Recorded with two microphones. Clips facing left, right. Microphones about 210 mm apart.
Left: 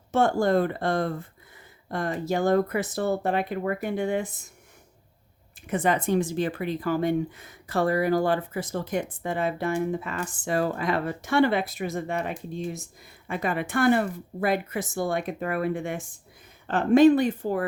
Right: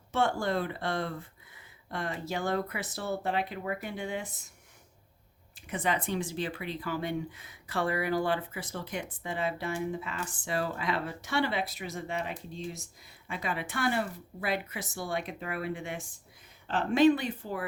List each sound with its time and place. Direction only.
0.1 s speech: 45° left (ahead or behind)
5.6 s speech: 50° left (ahead or behind)